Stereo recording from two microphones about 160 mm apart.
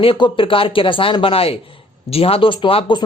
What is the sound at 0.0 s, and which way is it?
A man's voice, 35° left (ahead or behind).